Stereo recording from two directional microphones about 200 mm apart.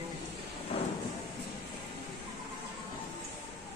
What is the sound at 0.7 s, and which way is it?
Thunder, 30° left (ahead or behind).